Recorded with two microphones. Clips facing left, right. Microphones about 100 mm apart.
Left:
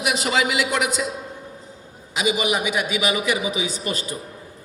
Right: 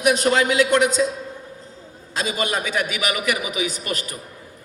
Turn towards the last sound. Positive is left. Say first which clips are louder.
# left 1 dB
turn(degrees=25)  # may be behind; listen again after turning